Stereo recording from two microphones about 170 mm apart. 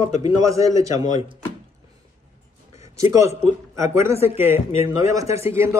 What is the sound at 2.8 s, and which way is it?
A man's voice, 20° right (ahead or behind).